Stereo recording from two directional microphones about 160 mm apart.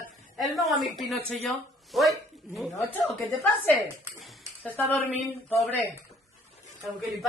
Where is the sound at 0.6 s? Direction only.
Centre (ahead or behind).